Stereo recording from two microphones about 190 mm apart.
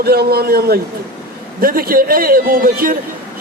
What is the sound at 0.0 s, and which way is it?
A man's voice, 55° right (ahead or behind).